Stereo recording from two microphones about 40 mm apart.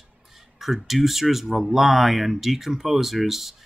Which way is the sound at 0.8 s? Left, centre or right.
Centre.